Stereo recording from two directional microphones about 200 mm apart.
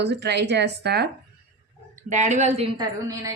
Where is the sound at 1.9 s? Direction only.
35° right (ahead or behind); by 3.3 s 20° right (ahead or behind).